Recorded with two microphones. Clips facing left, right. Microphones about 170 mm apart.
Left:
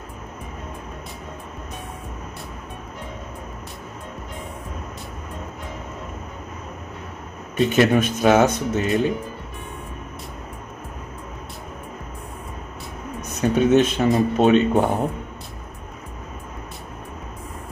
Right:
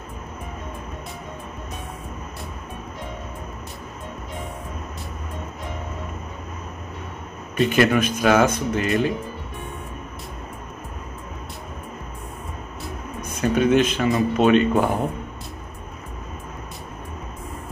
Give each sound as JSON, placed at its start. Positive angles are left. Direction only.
{"t": 7.5, "sound": "speech", "side_deg": 25}
{"t": 13.4, "sound": "speech", "side_deg": 25}